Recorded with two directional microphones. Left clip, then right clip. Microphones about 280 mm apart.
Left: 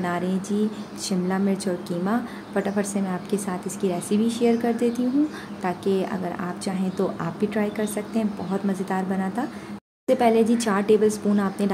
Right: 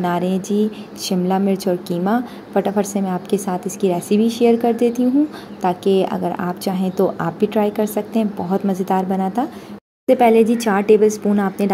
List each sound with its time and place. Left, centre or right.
0.0 s a woman's voice: centre